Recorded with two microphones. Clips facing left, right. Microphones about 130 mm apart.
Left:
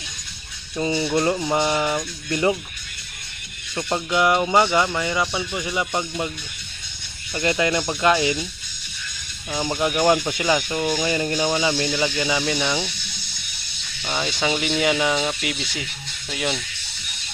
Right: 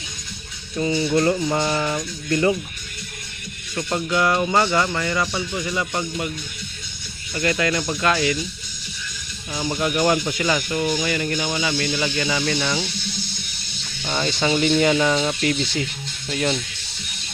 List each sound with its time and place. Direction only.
0.8 s speech: 25° left (ahead or behind)
3.8 s speech: 15° left (ahead or behind)
7.3 s speech: 20° left (ahead or behind)
9.5 s speech: 20° left (ahead or behind)
11.9 s speech: 15° left (ahead or behind)
14.0 s speech: 10° left (ahead or behind)